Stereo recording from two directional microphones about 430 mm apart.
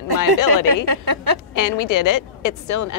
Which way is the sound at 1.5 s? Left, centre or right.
Left.